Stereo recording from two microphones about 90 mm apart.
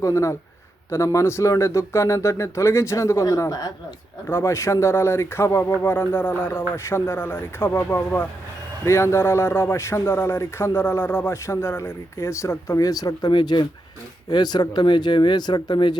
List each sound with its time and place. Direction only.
0.0 s speech: 35° left (ahead or behind)
4.3 s a man's voice: 30° left (ahead or behind); by 16.0 s 55° left (ahead or behind)